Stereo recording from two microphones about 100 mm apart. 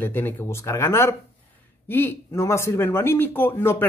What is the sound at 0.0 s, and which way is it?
Speech, 20° left (ahead or behind).